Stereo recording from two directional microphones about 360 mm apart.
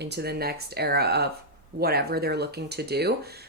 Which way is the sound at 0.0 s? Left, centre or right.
Right.